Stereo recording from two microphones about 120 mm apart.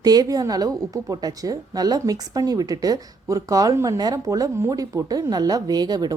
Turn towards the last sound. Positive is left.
turn(degrees=-35)  # may be behind; listen again after turning